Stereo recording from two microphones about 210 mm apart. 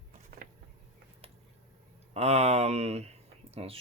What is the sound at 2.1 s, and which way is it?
Speech, 30° right (ahead or behind).